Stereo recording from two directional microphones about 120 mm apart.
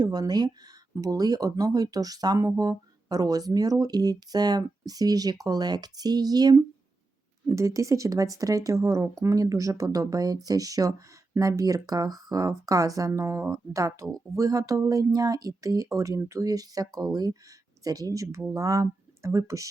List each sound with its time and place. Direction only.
0.0 s speech: 35° right (ahead or behind)